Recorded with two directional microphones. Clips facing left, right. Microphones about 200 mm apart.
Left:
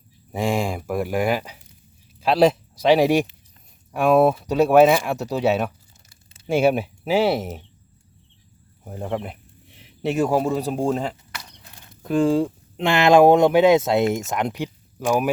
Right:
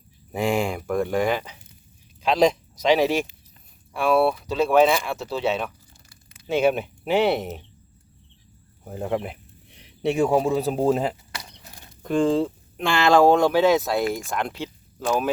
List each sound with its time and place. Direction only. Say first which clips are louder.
0.4 s speech: even; centre (ahead or behind)
4.5 s speech: left 4 dB; 15° left (ahead or behind)
8.8 s speech: right 1 dB; centre (ahead or behind)
12.0 s speech: left 2 dB; 5° left (ahead or behind)
12.7 s speech: left 3 dB; 20° left (ahead or behind)